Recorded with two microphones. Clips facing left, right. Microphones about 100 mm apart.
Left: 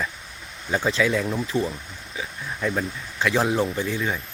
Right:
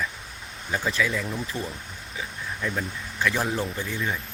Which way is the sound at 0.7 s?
25° left (ahead or behind).